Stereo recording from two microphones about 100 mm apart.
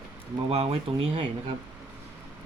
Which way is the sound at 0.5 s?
90° right.